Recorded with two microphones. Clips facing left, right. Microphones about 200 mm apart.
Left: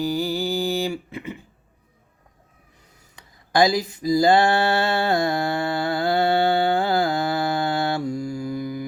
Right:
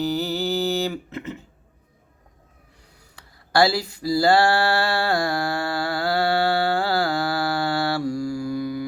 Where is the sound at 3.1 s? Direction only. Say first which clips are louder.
Even; 15° left (ahead or behind).